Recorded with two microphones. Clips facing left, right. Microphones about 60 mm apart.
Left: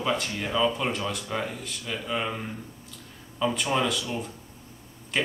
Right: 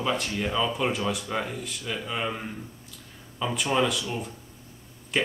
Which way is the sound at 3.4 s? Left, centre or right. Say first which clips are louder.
Even; centre.